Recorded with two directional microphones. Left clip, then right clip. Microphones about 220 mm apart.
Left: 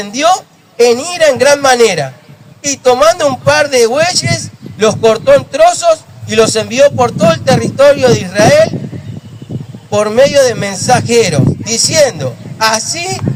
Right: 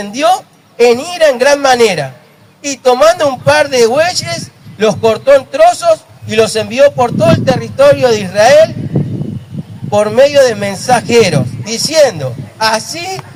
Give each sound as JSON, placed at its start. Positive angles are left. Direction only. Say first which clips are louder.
{"t": 0.0, "sound": "a man's voice", "louder": "left 1 dB", "side_deg": 25}
{"t": 9.9, "sound": "a man's voice", "louder": "right 1 dB", "side_deg": 25}